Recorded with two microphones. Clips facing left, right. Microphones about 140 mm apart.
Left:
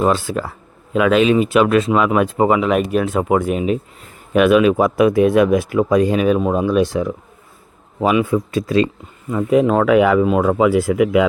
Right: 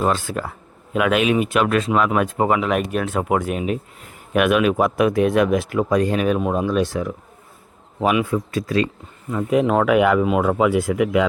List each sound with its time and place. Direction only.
0.3 s speech: 10° left (ahead or behind)
0.9 s a man's voice: 5° right (ahead or behind)
6.8 s speech: 20° left (ahead or behind)
8.0 s speech: centre (ahead or behind)
8.4 s speech: 20° left (ahead or behind)
9.5 s speech: 5° right (ahead or behind)